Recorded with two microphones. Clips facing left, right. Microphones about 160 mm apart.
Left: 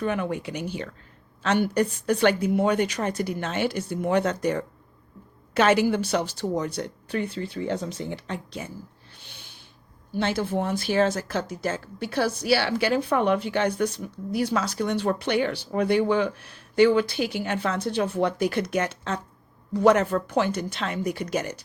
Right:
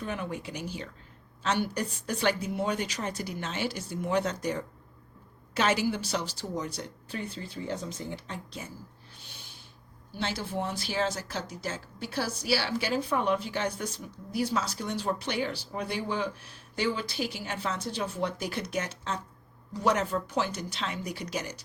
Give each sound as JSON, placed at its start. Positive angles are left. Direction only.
{"t": 0.0, "sound": "speech", "side_deg": 65}
{"t": 10.1, "sound": "speech", "side_deg": 55}